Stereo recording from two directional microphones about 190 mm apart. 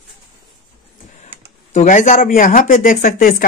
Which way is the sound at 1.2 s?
40° left (ahead or behind).